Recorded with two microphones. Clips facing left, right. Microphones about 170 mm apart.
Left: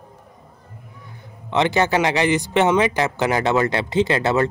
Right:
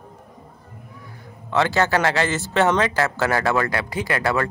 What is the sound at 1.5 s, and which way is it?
Speech, 20° left (ahead or behind).